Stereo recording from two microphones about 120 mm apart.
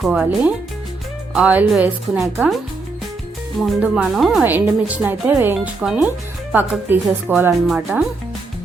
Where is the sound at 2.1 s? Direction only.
Centre (ahead or behind).